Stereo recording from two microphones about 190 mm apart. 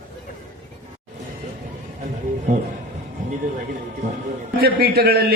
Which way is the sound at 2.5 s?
40° right (ahead or behind).